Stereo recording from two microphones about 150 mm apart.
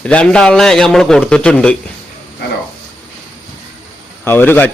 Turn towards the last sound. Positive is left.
turn(degrees=15)  # may be behind; listen again after turning